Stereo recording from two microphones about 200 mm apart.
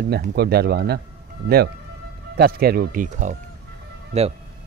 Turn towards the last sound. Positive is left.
turn(degrees=-30)  # may be behind; listen again after turning